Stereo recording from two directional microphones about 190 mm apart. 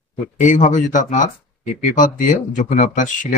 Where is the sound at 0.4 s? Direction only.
40° left (ahead or behind).